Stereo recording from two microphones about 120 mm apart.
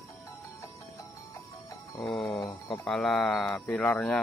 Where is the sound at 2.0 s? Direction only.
Centre (ahead or behind).